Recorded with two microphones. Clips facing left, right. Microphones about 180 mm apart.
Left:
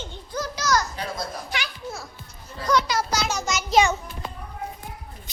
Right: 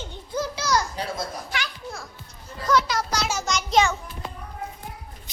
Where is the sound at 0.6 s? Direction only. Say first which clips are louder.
Left 3 dB; 30° right (ahead or behind).